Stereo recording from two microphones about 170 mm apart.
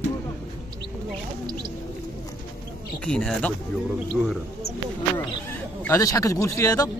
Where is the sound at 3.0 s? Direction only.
5° left (ahead or behind).